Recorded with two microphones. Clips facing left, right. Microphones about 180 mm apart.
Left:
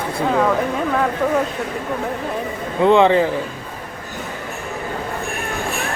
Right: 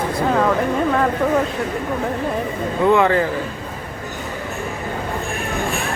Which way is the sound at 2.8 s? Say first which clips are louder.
Left 2 dB; 20° left (ahead or behind).